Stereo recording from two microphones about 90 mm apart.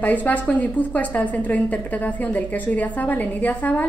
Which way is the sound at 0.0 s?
20° left (ahead or behind).